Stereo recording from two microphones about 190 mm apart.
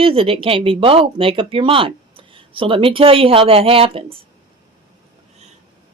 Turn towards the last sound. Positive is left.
turn(degrees=-30)  # may be behind; listen again after turning